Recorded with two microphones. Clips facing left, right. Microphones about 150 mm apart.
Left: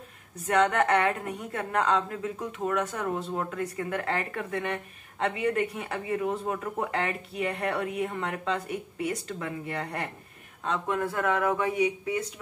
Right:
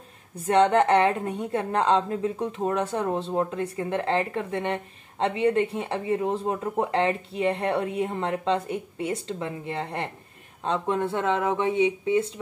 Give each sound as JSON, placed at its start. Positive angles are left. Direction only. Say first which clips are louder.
{"t": 0.5, "sound": "a woman's voice", "louder": "right 4 dB", "side_deg": -30}